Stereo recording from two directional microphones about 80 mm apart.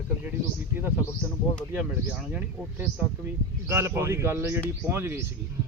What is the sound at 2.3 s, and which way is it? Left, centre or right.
Speech, centre.